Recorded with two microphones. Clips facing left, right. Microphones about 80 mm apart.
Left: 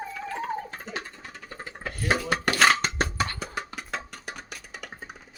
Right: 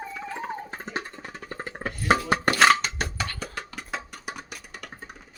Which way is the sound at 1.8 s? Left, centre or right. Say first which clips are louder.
Right 3 dB; right.